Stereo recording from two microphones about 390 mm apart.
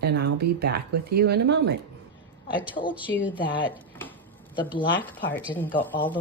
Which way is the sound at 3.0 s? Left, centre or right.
Centre.